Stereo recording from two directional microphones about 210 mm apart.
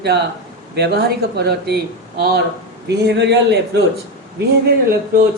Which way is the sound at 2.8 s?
55° right (ahead or behind).